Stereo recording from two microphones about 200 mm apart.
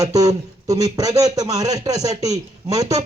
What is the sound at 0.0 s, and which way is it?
A man's voice, 15° right (ahead or behind).